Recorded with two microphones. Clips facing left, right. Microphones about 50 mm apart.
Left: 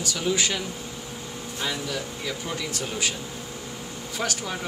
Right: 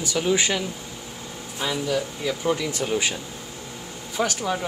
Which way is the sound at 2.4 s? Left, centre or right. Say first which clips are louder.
Right 7 dB; centre.